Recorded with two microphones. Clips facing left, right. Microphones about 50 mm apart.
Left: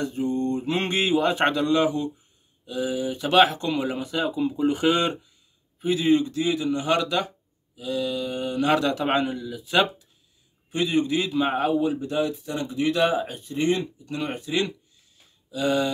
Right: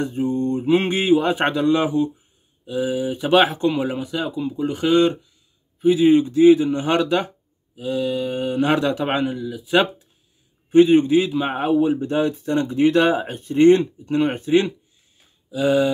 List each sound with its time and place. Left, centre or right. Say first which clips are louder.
0.0 s speech: right 4 dB; right
0.7 s speech: right 6 dB; centre
6.0 s speech: right 4 dB; centre
6.4 s speech: right 11 dB; right
9.0 s speech: right 2 dB; centre
10.7 s a man's voice: right 10 dB; right
11.1 s speech: right 4 dB; centre
11.8 s speech: right 5 dB; right
14.0 s a man's voice: right 9 dB; right
15.5 s speech: right 5 dB; centre